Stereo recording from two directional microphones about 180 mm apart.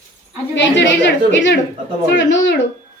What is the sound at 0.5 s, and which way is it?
A woman's voice, 75° left (ahead or behind).